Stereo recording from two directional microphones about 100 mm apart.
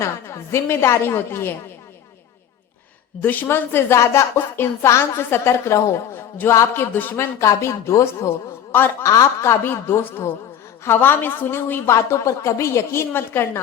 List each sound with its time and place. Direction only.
0.0 s a woman's voice: 30° left (ahead or behind)
3.2 s a woman's voice: 20° left (ahead or behind)
9.0 s a woman's voice: 30° left (ahead or behind)